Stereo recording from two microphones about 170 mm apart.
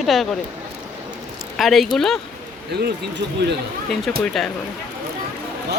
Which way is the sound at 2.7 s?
70° right (ahead or behind).